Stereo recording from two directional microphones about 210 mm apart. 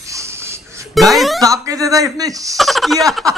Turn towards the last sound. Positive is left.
turn(degrees=0)  # may be behind; listen again after turning